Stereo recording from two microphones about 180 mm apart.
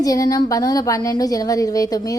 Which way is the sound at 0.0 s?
20° left (ahead or behind).